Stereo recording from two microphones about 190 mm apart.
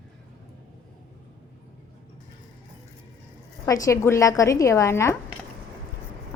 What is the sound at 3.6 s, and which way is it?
A woman's voice, 15° left (ahead or behind).